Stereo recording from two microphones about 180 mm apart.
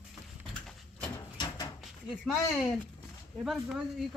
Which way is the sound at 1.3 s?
25° left (ahead or behind).